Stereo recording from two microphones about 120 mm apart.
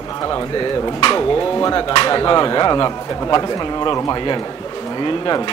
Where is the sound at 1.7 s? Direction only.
40° left (ahead or behind).